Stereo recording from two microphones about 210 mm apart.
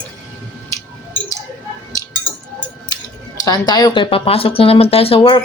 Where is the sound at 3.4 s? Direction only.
20° left (ahead or behind).